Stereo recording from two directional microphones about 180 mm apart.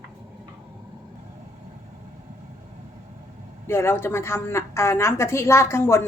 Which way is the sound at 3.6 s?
15° left (ahead or behind).